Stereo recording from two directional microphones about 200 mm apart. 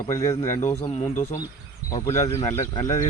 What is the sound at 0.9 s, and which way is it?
Speech, 30° left (ahead or behind).